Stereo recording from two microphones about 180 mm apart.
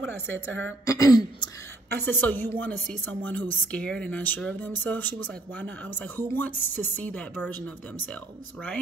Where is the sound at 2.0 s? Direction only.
10° left (ahead or behind).